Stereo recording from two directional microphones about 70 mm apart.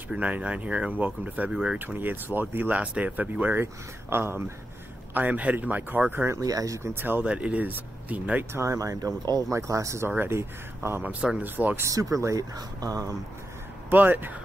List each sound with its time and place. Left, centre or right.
0.1 s speech: centre
1.8 s speech: right
5.1 s speech: right
6.4 s speech: right
6.8 s speech: right
7.2 s speech: centre
8.5 s speech: right
9.5 s speech: right
10.0 s speech: right
11.0 s speech: centre
11.4 s speech: right
11.9 s speech: right
13.8 s speech: right